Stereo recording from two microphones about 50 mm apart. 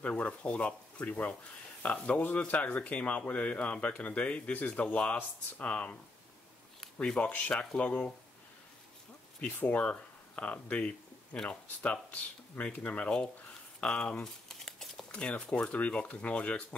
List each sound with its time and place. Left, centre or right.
0.0 s speech: left
6.8 s a sound: centre
7.2 s speech: left
9.6 s speech: left
14.2 s crumpling: centre
15.1 s speech: left